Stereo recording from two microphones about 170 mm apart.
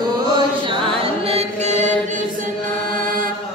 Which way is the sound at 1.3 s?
40° right (ahead or behind).